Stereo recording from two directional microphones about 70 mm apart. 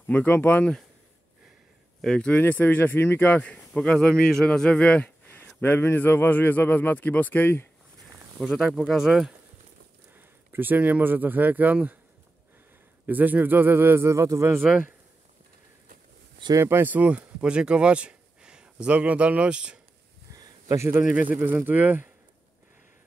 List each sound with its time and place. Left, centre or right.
0.0 s a man's voice: left
2.0 s speech: centre
2.3 s speech: left
5.3 s a man's voice: left
8.4 s speech: centre
10.1 s speech: right
13.0 s speech: right
16.6 s speech: right; by 19.8 s centre
20.2 s a sound: right
21.1 s speech: right